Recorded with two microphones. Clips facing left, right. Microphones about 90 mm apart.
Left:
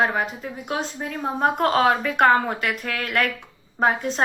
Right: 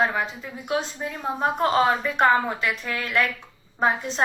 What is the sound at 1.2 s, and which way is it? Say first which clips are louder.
Speech: left 2 dB; 50° left (ahead or behind).